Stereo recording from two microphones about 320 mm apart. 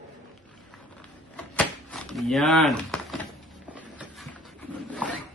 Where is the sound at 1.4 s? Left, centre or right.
Centre.